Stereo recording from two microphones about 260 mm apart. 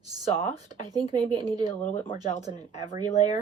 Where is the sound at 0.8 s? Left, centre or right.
Centre.